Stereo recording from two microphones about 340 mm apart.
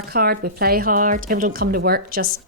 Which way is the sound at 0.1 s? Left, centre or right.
Right.